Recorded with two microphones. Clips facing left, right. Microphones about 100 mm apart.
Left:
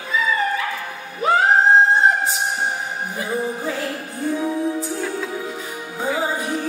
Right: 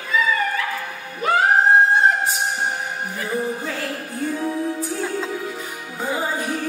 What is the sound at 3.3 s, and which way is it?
Music, 15° left (ahead or behind).